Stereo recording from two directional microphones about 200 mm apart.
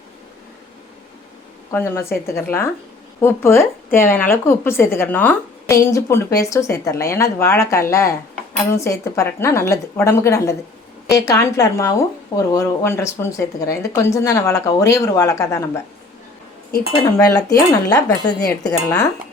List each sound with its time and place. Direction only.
1.7 s speech: 15° left (ahead or behind)
17.0 s speech: 15° left (ahead or behind)